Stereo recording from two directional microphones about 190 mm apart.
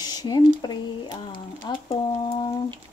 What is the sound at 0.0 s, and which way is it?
Speech, 20° left (ahead or behind).